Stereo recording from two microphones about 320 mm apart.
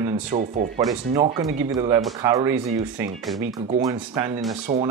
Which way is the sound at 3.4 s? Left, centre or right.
Right.